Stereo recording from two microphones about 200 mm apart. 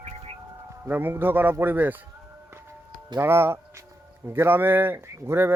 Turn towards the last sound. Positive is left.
turn(degrees=-10)  # may be behind; listen again after turning